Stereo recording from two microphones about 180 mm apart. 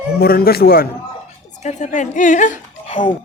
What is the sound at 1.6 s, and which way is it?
Speech, 40° left (ahead or behind).